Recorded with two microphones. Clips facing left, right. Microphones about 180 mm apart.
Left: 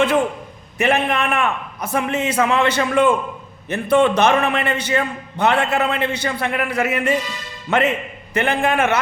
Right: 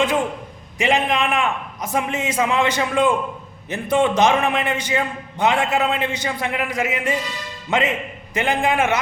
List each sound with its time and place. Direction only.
0.8 s a man's voice: 15° right (ahead or behind)